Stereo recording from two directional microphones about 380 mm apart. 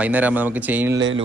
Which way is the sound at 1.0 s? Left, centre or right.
Right.